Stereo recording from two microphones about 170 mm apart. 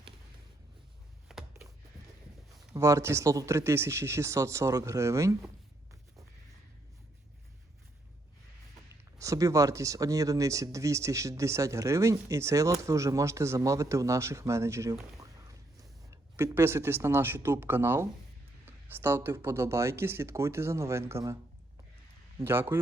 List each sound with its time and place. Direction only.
1.3 s a sound: centre (ahead or behind)
2.7 s speech: 15° right (ahead or behind)
9.1 s speech: 20° right (ahead or behind)
15.2 s a sound: 20° right (ahead or behind)
16.0 s speech: 15° right (ahead or behind)
22.4 s a man's voice: 15° right (ahead or behind)